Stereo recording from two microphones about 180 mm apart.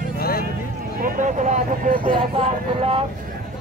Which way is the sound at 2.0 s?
35° right (ahead or behind).